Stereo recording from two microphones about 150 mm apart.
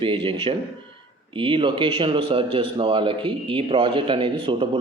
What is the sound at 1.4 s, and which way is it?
Speech, 35° right (ahead or behind).